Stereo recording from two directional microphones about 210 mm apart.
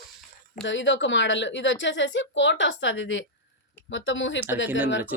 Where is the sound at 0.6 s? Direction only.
60° left (ahead or behind).